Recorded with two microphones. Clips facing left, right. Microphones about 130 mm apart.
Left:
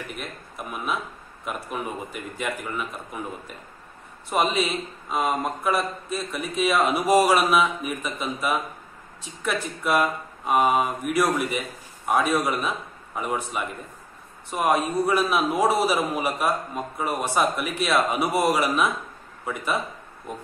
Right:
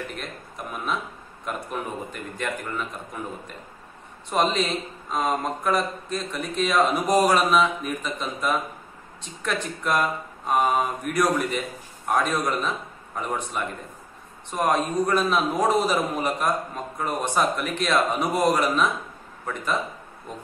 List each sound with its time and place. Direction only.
0.1 s a man's voice: 5° left (ahead or behind)
4.3 s a man's voice: 5° left (ahead or behind)